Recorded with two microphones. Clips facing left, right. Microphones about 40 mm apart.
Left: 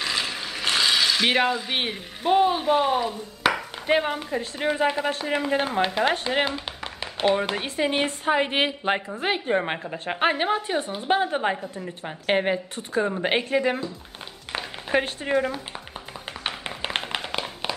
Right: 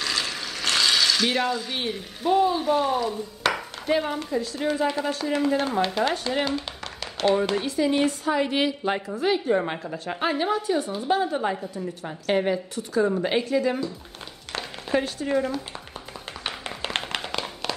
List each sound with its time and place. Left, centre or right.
0.0 s mechanisms: centre
1.2 s a woman's voice: left
3.4 s dishes: centre
3.9 s speech: left
6.4 s a sound: left
7.5 s a woman's voice: left
14.9 s speech: left
16.4 s clapping: centre